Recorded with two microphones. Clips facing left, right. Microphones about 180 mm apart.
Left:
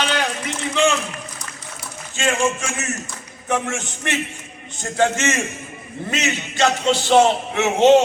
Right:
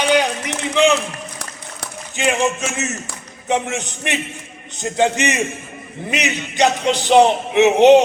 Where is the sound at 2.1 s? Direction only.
20° right (ahead or behind).